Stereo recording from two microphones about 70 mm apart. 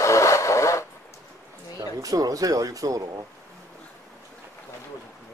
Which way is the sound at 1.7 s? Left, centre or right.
Right.